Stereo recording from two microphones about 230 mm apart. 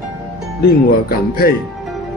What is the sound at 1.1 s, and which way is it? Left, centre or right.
Speech, left.